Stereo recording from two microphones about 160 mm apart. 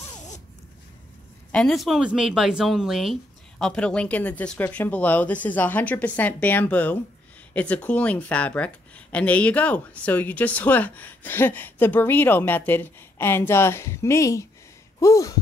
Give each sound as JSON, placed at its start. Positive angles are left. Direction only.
{"t": 1.5, "sound": "speech", "side_deg": 5}
{"t": 15.0, "sound": "sigh", "side_deg": 20}